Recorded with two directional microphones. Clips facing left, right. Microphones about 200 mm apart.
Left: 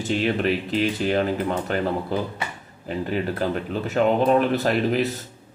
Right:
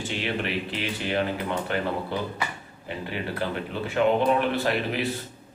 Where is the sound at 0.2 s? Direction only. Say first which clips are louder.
Left 5 dB; 40° left (ahead or behind).